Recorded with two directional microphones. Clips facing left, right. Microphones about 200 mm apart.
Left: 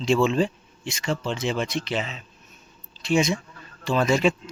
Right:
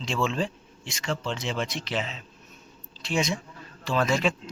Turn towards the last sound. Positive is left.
turn(degrees=0)  # may be behind; listen again after turning